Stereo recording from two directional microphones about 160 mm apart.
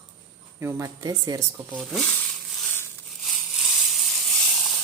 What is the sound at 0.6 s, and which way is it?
Speech, 20° right (ahead or behind).